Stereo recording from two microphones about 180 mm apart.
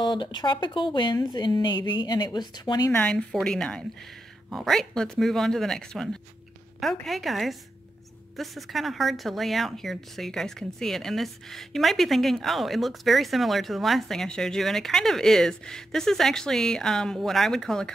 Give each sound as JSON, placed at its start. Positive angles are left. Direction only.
{"t": 0.0, "sound": "speech", "side_deg": 25}
{"t": 2.9, "sound": "speech", "side_deg": 5}